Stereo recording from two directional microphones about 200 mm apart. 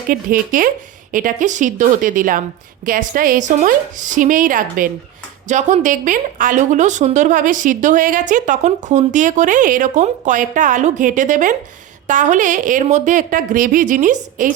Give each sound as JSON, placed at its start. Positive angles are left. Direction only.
{"t": 0.1, "sound": "a woman's voice", "side_deg": -45}